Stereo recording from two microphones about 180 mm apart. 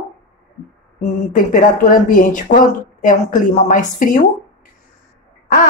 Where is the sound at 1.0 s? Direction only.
45° left (ahead or behind).